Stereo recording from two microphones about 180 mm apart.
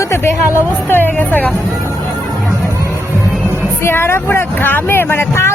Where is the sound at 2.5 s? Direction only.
15° right (ahead or behind).